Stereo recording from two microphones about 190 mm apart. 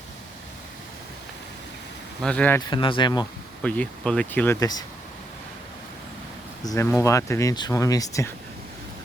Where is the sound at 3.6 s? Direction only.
5° left (ahead or behind).